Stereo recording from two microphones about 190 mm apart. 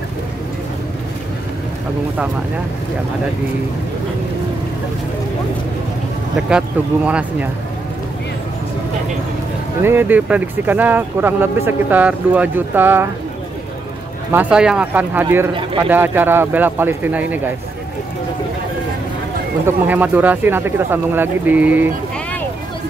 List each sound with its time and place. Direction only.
7.1 s speech: 5° right (ahead or behind)
9.8 s speech: 10° right (ahead or behind)
14.3 s speech: 5° right (ahead or behind)
19.6 s speech: 10° right (ahead or behind)